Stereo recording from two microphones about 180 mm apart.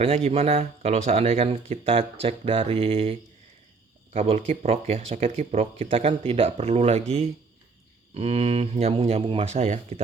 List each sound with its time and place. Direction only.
0.0 s speech: 35° right (ahead or behind)